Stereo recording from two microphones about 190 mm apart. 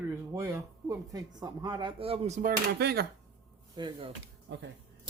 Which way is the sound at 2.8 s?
60° right (ahead or behind).